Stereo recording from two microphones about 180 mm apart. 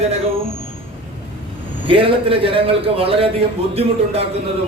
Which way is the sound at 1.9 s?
30° right (ahead or behind).